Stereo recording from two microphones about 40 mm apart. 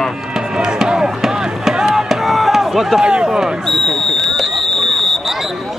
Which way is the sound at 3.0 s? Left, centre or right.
Centre.